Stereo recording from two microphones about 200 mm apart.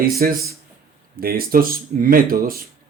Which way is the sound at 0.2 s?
45° right (ahead or behind).